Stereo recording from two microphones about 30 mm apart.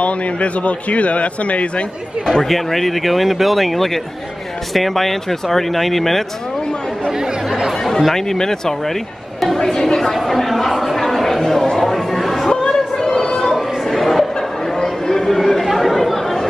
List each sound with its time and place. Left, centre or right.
0.0 s a man's voice: left
2.4 s speech: centre
7.1 s chatter: right
8.1 s speech: centre
10.2 s a sound: centre
11.8 s chatter: centre
12.6 s chatter: left
13.7 s a sound: centre
14.9 s chatter: centre